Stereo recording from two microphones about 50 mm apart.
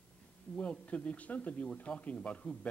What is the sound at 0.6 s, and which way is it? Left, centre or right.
A man's voice, left.